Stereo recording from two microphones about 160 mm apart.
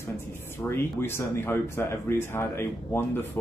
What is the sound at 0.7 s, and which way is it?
Speech, 15° left (ahead or behind).